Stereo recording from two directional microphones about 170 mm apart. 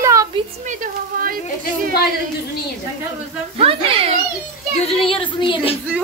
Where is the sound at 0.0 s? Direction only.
20° right (ahead or behind).